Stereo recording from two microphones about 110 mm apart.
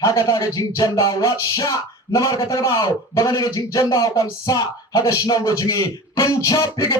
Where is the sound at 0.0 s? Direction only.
30° left (ahead or behind).